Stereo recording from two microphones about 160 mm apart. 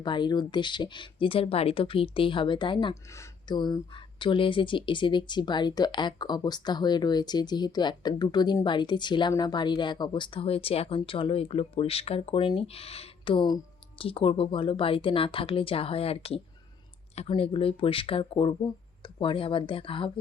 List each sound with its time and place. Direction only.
0.0 s speech: 30° left (ahead or behind)
2.9 s speech: 20° left (ahead or behind); by 20.1 s 35° left (ahead or behind)